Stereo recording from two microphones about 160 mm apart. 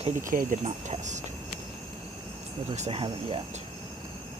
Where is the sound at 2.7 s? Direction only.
40° right (ahead or behind).